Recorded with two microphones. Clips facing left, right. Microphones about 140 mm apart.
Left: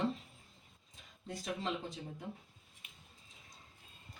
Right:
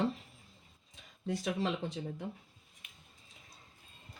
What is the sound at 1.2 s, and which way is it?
Speech, 80° right.